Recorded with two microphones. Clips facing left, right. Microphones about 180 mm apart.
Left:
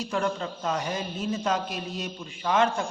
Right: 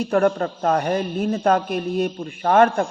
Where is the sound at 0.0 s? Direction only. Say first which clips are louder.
Right 10 dB; 55° right (ahead or behind).